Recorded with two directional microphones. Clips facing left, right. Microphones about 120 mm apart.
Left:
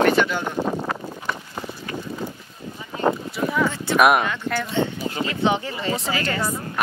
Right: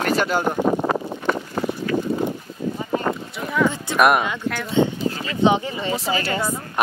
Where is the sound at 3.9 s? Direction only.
Centre (ahead or behind).